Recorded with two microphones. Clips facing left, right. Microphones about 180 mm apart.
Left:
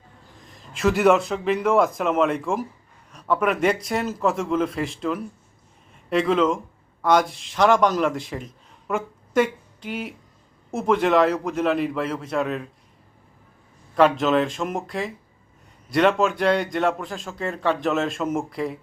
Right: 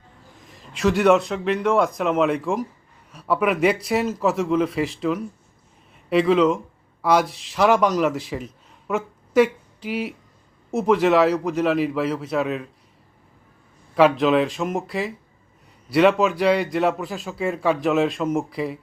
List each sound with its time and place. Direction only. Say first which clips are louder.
0.4 s a man's voice: right 1 dB; centre (ahead or behind)
13.9 s a man's voice: right 2 dB; centre (ahead or behind)